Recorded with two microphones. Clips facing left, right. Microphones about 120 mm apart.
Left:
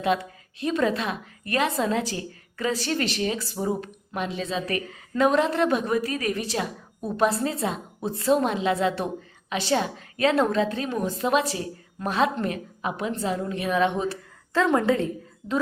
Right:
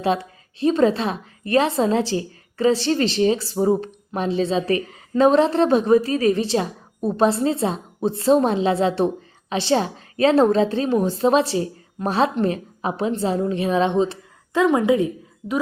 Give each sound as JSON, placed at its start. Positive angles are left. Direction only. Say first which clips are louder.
{"t": 0.0, "sound": "a woman's voice", "louder": "right 3 dB", "side_deg": -30}